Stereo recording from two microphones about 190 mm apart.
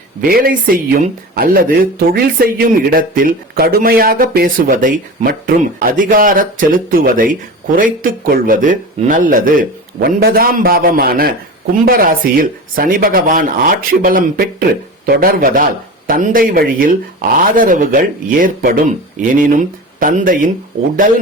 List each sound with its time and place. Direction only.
0.2 s speech: 50° right (ahead or behind)